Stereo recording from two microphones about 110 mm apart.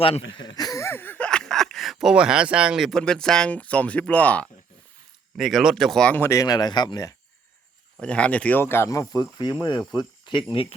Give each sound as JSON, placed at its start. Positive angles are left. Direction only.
{"t": 0.0, "sound": "a sound", "side_deg": 50}
{"t": 2.9, "sound": "speech", "side_deg": 5}
{"t": 5.4, "sound": "speech", "side_deg": 0}
{"t": 6.1, "sound": "speech", "side_deg": 20}
{"t": 8.0, "sound": "speech", "side_deg": 10}
{"t": 10.5, "sound": "speech", "side_deg": 55}